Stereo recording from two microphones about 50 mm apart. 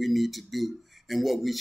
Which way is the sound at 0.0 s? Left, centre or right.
Centre.